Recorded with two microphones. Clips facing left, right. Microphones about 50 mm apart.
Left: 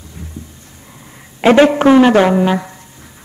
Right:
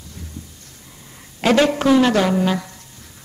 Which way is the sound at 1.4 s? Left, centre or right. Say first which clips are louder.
Left 7 dB; left.